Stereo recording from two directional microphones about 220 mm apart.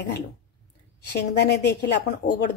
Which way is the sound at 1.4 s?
50° left (ahead or behind).